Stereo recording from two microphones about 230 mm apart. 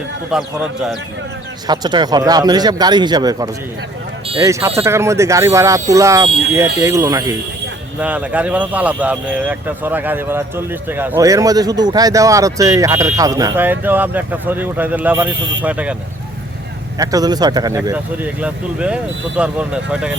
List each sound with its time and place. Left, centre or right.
0.3 s speech: centre
1.6 s speech: centre
17.0 s speech: centre